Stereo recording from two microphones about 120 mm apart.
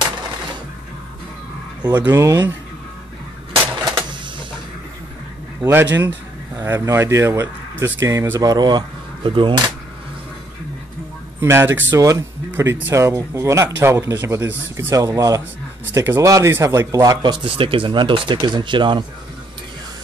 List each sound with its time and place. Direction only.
2.0 s a man's voice: 30° right (ahead or behind)
3.9 s a sound: 45° right (ahead or behind)
5.6 s a man's voice: 20° right (ahead or behind); by 9.6 s 45° right (ahead or behind)
11.4 s a man's voice: 20° right (ahead or behind); by 19.0 s 40° right (ahead or behind)